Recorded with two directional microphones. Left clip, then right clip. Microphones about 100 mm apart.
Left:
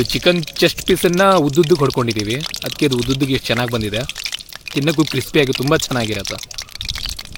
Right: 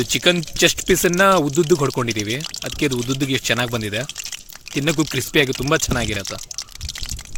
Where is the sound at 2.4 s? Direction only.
30° left (ahead or behind).